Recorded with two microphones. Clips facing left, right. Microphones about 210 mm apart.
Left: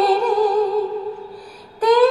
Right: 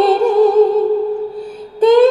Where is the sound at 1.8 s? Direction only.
25° right (ahead or behind).